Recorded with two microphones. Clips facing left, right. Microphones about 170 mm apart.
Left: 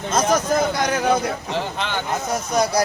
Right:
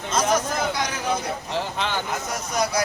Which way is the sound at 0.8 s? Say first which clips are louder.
Left 7 dB; 55° left (ahead or behind).